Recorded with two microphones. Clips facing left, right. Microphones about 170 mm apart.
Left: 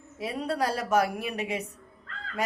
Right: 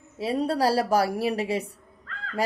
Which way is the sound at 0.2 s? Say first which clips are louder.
Right 5 dB; 30° right (ahead or behind).